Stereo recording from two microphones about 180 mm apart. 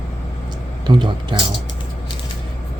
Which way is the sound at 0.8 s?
25° right (ahead or behind).